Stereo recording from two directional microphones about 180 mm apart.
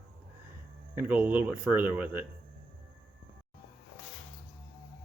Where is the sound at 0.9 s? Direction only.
10° right (ahead or behind).